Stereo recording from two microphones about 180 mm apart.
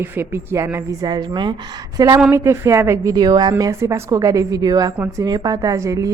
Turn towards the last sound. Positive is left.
turn(degrees=-15)  # may be behind; listen again after turning